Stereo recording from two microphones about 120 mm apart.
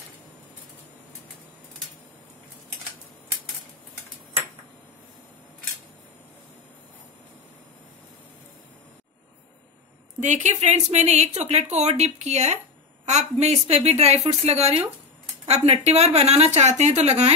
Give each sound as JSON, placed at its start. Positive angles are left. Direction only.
{"t": 10.2, "sound": "a woman's voice", "side_deg": -75}